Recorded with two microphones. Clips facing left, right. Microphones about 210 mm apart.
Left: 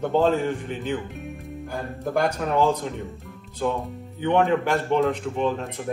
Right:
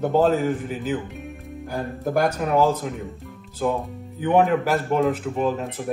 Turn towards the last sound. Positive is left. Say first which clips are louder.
# right 1 dB
turn(degrees=-5)  # may be behind; listen again after turning